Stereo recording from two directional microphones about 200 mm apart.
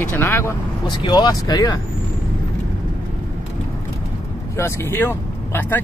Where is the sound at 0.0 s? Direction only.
10° left (ahead or behind).